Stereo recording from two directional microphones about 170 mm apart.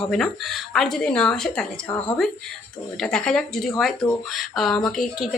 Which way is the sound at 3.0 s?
5° left (ahead or behind).